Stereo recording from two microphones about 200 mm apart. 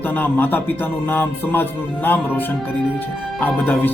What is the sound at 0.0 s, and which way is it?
Speech, 10° left (ahead or behind).